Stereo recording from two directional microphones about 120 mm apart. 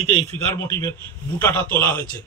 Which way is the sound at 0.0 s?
60° left (ahead or behind).